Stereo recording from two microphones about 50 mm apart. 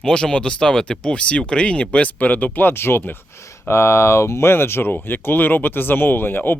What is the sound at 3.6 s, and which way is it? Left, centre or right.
Speech, left.